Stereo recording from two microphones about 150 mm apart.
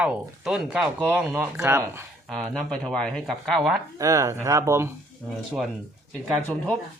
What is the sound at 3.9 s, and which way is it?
Speech, 20° right (ahead or behind).